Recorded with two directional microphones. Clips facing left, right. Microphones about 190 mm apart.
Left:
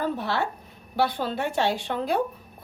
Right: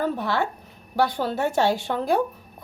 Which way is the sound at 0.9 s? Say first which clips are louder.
Right 2 dB; 45° right (ahead or behind).